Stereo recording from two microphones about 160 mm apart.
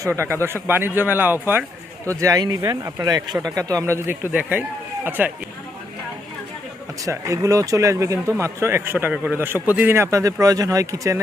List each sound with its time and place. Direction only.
0.0 s a man's voice: 15° right (ahead or behind)
7.0 s a man's voice: 20° right (ahead or behind)